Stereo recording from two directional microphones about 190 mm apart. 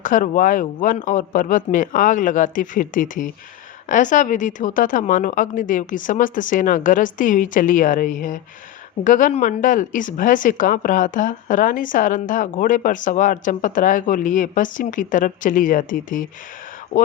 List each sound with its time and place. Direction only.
0.0 s speech: 45° left (ahead or behind)